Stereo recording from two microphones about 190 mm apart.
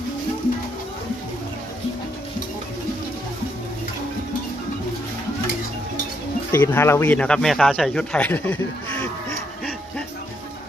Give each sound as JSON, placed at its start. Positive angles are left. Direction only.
{"t": 6.5, "sound": "speech", "side_deg": 10}